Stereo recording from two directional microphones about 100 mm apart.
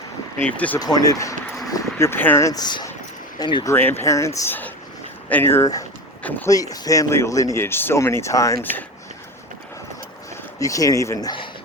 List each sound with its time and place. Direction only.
0.3 s speech: 15° left (ahead or behind)
0.8 s speech: 40° left (ahead or behind)
1.6 s a sound: 35° left (ahead or behind)
2.0 s speech: 20° left (ahead or behind)
2.4 s speech: 40° left (ahead or behind)
3.7 s speech: 20° left (ahead or behind)
6.5 s speech: 35° left (ahead or behind)
10.6 s speech: 35° left (ahead or behind)